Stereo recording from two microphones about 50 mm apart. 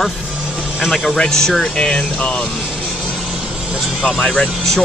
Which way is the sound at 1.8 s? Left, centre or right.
Left.